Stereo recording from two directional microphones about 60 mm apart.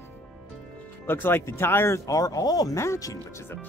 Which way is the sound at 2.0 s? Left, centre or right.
Left.